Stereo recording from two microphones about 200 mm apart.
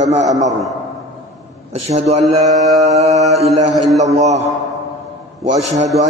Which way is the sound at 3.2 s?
35° right (ahead or behind).